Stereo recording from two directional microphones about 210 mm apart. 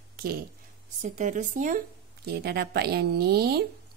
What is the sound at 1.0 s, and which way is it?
Speech, 35° right (ahead or behind).